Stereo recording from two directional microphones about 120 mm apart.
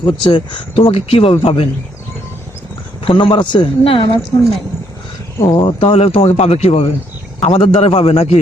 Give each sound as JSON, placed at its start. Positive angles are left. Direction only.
{"t": 0.0, "sound": "speech", "side_deg": 40}
{"t": 3.0, "sound": "speech", "side_deg": 50}
{"t": 5.4, "sound": "speech", "side_deg": 50}